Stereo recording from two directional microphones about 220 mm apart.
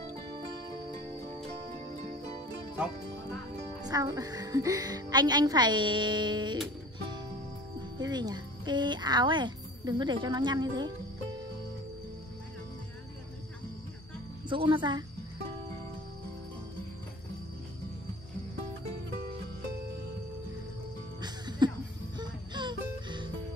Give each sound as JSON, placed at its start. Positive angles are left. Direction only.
{"t": 3.8, "sound": "a woman's voice", "side_deg": -15}
{"t": 8.0, "sound": "speech", "side_deg": -20}
{"t": 14.5, "sound": "speech", "side_deg": -20}
{"t": 21.2, "sound": "music", "side_deg": -20}